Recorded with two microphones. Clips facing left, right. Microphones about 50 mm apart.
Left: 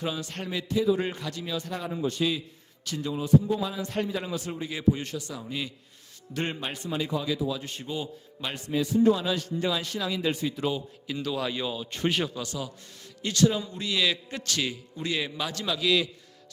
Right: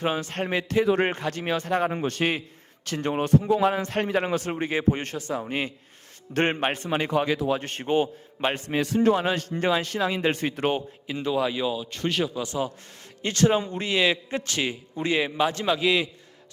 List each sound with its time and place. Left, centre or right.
0.0 s a man's voice: right
0.7 s a man's voice: right
8.8 s speech: right
9.1 s a man's voice: right
11.0 s a man's voice: right; by 12.3 s centre
12.5 s a man's voice: right